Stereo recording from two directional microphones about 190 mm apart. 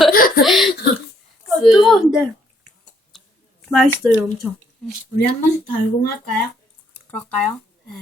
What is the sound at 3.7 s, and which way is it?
Speech, 5° left (ahead or behind).